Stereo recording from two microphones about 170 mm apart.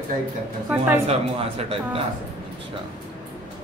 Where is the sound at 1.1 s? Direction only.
35° right (ahead or behind).